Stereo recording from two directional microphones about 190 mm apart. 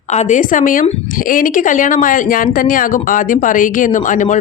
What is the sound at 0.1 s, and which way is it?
Speech, 40° left (ahead or behind).